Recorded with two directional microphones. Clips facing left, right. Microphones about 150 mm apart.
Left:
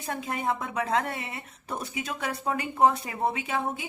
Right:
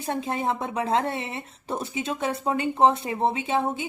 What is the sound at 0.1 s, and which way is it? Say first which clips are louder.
A woman's voice: right 3 dB; 30° right (ahead or behind).